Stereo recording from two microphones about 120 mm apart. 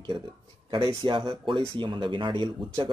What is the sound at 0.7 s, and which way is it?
A man's voice, 45° right (ahead or behind).